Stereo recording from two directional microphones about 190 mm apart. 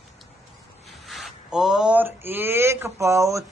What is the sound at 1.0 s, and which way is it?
Speech, centre (ahead or behind).